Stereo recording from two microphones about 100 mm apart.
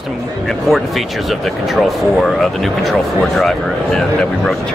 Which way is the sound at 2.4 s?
Centre (ahead or behind).